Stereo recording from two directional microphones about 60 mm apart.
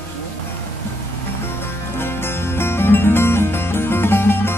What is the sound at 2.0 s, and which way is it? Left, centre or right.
Music, left.